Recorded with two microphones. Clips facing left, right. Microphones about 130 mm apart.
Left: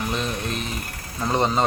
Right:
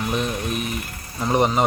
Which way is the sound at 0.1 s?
15° right (ahead or behind).